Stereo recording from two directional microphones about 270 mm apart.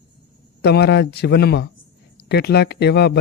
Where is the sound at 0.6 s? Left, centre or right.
Left.